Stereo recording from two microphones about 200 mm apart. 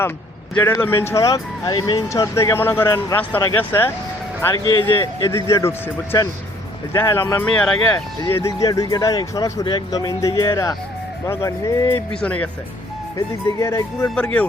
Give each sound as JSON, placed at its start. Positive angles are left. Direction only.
{"t": 0.6, "sound": "speech", "side_deg": 10}
{"t": 13.1, "sound": "speech", "side_deg": 15}